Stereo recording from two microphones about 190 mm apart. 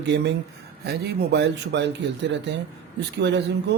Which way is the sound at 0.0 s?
70° right (ahead or behind).